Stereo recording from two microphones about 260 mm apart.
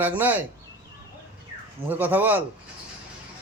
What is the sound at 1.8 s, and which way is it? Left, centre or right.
Speech, centre.